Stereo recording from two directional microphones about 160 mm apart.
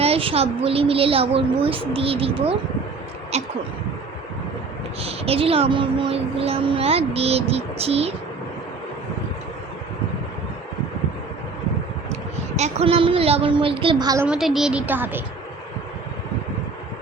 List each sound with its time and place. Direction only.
0.0 s speech: 35° right (ahead or behind)
5.0 s speech: 40° right (ahead or behind)
12.5 s speech: 45° right (ahead or behind); by 14.3 s 25° right (ahead or behind)
14.3 s a woman's voice: centre (ahead or behind)